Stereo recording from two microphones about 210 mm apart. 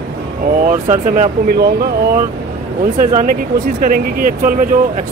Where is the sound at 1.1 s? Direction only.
40° right (ahead or behind).